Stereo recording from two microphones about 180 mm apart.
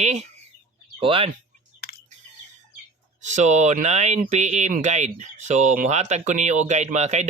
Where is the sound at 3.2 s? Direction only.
40° right (ahead or behind).